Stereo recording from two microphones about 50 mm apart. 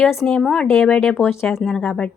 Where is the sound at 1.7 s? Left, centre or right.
Centre.